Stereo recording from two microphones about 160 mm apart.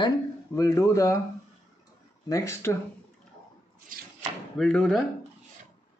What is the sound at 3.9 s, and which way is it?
Speech, 60° right (ahead or behind).